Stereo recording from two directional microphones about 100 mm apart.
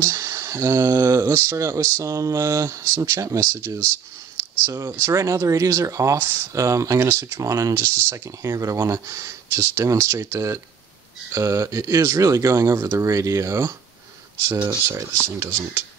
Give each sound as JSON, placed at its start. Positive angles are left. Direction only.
{"t": 0.0, "sound": "speech", "side_deg": -30}
{"t": 14.9, "sound": "speech", "side_deg": -25}